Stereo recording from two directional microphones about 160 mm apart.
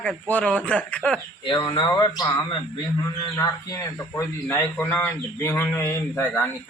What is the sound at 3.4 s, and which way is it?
A man's voice, 15° left (ahead or behind).